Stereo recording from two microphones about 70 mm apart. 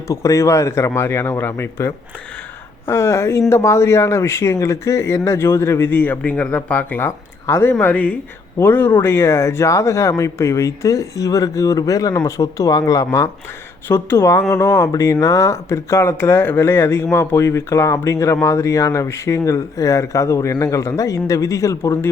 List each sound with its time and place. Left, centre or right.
0.1 s speech: left
5.9 s speech: left
7.0 s speech: left
13.8 s speech: left